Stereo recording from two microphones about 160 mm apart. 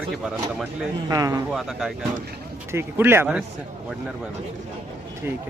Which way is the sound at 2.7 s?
15° right (ahead or behind).